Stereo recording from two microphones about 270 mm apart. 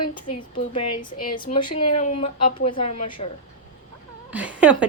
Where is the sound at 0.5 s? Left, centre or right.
Left.